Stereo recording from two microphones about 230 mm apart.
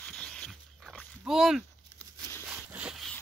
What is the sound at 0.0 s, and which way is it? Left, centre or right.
Dog, centre.